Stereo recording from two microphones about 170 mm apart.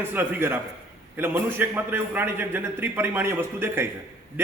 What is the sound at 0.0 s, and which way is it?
A man's voice, 10° right (ahead or behind).